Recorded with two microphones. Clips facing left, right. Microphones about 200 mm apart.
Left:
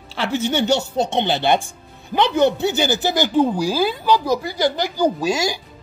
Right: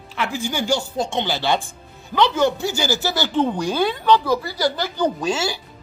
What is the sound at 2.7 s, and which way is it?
A woman's voice, 20° left (ahead or behind).